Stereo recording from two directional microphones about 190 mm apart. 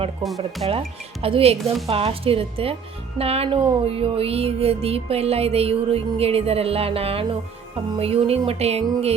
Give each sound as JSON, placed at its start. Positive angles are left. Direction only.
{"t": 0.2, "sound": "speech", "side_deg": 0}
{"t": 0.7, "sound": "music", "side_deg": -30}